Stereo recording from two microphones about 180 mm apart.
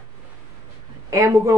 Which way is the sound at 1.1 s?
15° right (ahead or behind).